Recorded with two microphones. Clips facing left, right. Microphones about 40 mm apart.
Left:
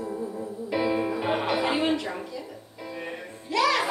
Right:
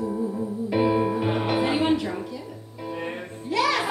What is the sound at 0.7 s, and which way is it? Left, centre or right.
Music, right.